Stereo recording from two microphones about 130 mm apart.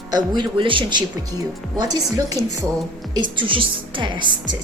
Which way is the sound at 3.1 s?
40° right (ahead or behind).